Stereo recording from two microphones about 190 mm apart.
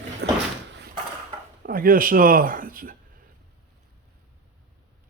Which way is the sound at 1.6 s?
50° right (ahead or behind).